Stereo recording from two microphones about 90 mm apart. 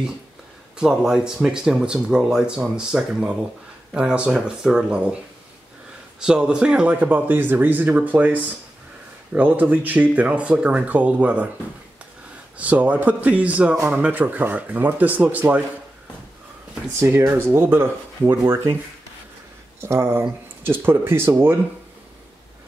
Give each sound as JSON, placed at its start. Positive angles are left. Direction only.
{"t": 0.7, "sound": "speech", "side_deg": -10}
{"t": 6.1, "sound": "speech", "side_deg": -10}
{"t": 12.5, "sound": "speech", "side_deg": -15}
{"t": 17.0, "sound": "speech", "side_deg": -30}
{"t": 19.8, "sound": "speech", "side_deg": -25}